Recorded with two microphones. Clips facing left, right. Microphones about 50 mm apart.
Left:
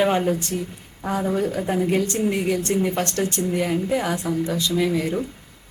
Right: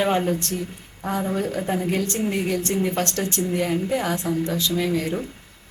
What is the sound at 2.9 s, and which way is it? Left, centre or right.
Speech, centre.